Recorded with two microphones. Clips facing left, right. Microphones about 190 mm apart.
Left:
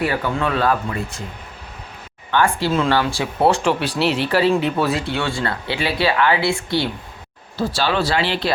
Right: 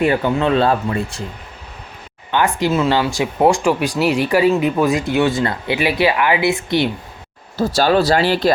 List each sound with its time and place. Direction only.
0.0 s speech: 20° right (ahead or behind)
2.3 s speech: 15° right (ahead or behind)
7.5 s speech: 40° right (ahead or behind)